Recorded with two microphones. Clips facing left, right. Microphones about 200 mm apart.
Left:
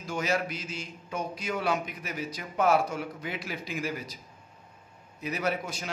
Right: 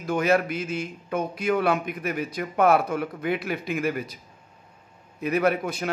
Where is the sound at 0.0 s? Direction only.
60° right (ahead or behind).